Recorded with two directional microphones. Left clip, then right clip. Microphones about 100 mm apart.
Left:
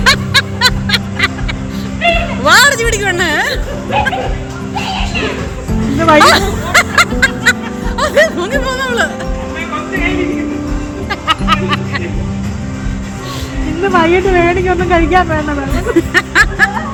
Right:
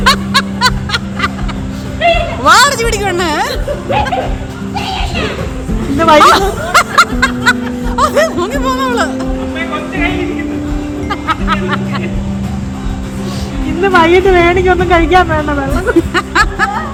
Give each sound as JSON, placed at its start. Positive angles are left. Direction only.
{"t": 0.0, "sound": "music", "side_deg": -5}
{"t": 2.4, "sound": "music", "side_deg": -10}
{"t": 6.0, "sound": "speech", "side_deg": -25}
{"t": 6.2, "sound": "music", "side_deg": -10}
{"t": 11.1, "sound": "music", "side_deg": -5}
{"t": 13.8, "sound": "speech", "side_deg": -15}
{"t": 15.7, "sound": "music", "side_deg": 0}